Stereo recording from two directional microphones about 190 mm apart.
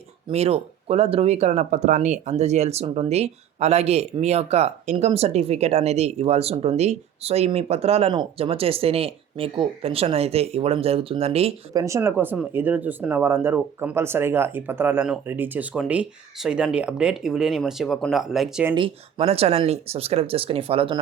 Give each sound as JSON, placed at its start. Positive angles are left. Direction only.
{"t": 0.3, "sound": "speech", "side_deg": -30}
{"t": 11.7, "sound": "speech", "side_deg": -15}
{"t": 18.7, "sound": "speech", "side_deg": -25}